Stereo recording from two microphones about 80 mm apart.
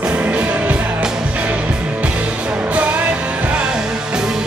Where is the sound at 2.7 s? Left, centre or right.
Centre.